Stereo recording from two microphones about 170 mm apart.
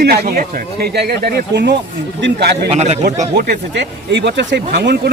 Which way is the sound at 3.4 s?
80° right.